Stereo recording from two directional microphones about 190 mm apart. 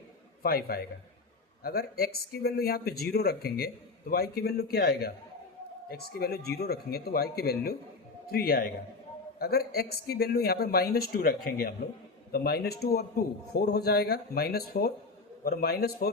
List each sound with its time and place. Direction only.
0.4 s speech: 55° left (ahead or behind)